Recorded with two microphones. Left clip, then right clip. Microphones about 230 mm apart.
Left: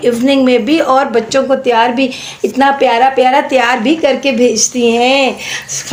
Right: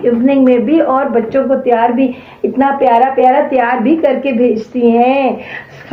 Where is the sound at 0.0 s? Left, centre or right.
Left.